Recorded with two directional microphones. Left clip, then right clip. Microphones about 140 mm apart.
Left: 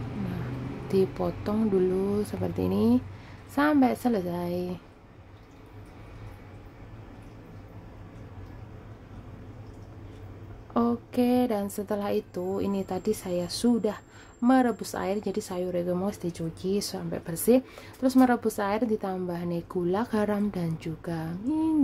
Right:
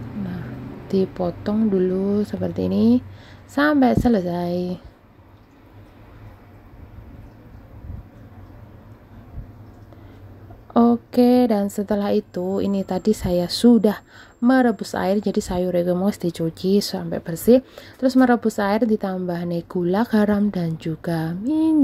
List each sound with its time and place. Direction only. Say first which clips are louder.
0.8 s speech: right 4 dB; 15° right (ahead or behind)
10.7 s speech: right 9 dB; 35° right (ahead or behind)
14.5 s speech: right 6 dB; 25° right (ahead or behind)